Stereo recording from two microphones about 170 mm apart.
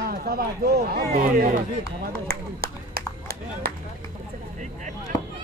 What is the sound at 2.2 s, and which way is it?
Clapping, 60° right (ahead or behind).